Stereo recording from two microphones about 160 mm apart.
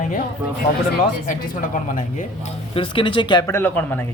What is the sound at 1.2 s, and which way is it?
Speech, 55° left (ahead or behind).